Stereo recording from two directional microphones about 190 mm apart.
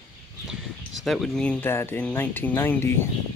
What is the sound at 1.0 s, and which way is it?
Speech, centre (ahead or behind).